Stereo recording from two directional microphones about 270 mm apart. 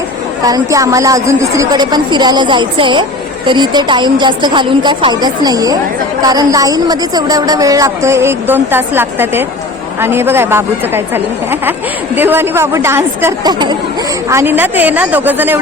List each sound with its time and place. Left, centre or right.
0.4 s a woman's voice: centre